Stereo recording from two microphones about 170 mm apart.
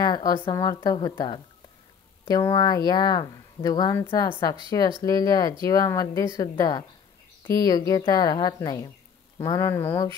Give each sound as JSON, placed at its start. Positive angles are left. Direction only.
{"t": 0.0, "sound": "speech", "side_deg": 25}